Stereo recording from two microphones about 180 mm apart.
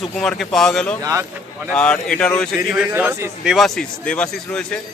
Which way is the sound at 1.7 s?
5° left (ahead or behind).